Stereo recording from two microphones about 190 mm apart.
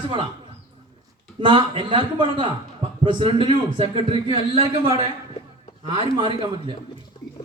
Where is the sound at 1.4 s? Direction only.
25° right (ahead or behind).